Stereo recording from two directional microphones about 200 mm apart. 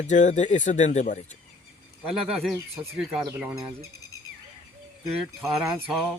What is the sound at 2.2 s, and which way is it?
Speech, centre (ahead or behind).